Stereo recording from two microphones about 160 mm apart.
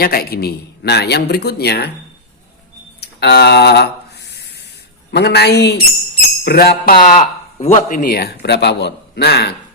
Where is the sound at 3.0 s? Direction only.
90° left.